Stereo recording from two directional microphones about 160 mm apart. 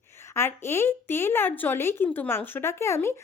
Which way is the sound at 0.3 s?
15° left (ahead or behind).